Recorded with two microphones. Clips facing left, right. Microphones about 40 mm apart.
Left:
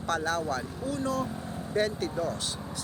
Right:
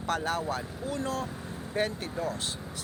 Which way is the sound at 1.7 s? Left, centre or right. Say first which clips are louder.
Left 2 dB; right.